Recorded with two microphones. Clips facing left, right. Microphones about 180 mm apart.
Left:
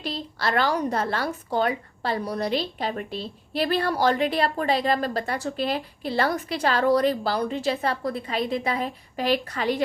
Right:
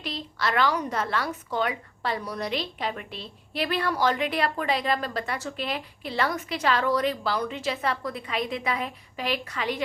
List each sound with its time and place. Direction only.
0.0 s a woman's voice: 35° left (ahead or behind)